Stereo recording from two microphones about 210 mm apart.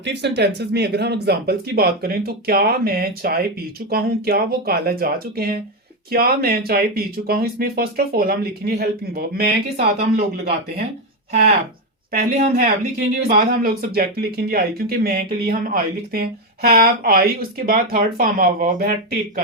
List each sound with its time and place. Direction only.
0.0 s speech: 55° right (ahead or behind)
12.4 s speech: 35° right (ahead or behind)